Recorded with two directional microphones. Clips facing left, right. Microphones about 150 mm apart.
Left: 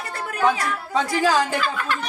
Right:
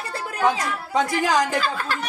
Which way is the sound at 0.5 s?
20° right (ahead or behind).